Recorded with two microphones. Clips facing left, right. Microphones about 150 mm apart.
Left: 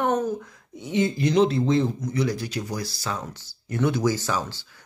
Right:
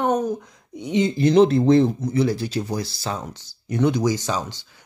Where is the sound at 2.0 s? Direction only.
30° right (ahead or behind).